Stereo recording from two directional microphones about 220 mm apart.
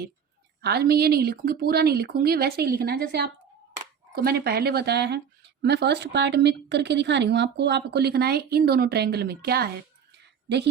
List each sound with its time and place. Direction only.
0.6 s speech: 45° right (ahead or behind)